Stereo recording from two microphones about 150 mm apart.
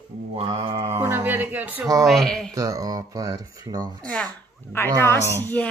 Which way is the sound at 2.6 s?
25° right (ahead or behind).